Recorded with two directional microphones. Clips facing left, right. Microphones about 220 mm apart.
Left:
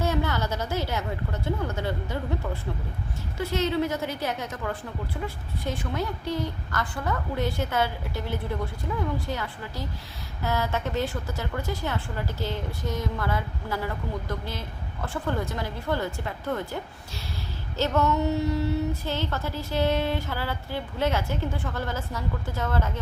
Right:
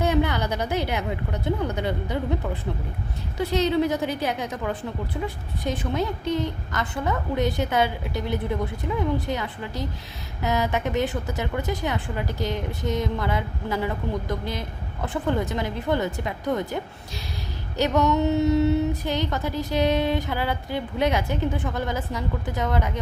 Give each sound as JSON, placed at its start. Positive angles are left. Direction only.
{"t": 0.0, "sound": "female singing", "side_deg": -15}
{"t": 5.2, "sound": "a woman's voice", "side_deg": -20}
{"t": 10.4, "sound": "female singing", "side_deg": -15}
{"t": 15.0, "sound": "a woman's voice", "side_deg": -20}
{"t": 17.7, "sound": "female singing", "side_deg": -15}